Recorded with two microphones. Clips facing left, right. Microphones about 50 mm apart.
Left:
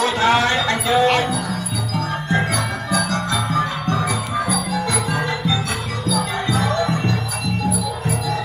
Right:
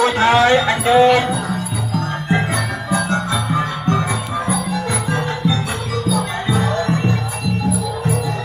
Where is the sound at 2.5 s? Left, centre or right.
Right.